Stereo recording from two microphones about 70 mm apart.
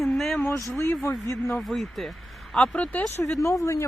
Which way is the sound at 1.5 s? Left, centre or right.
Centre.